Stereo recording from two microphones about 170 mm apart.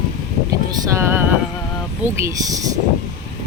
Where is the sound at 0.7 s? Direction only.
15° right (ahead or behind).